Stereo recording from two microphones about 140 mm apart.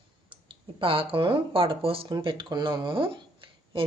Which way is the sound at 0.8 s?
40° right (ahead or behind).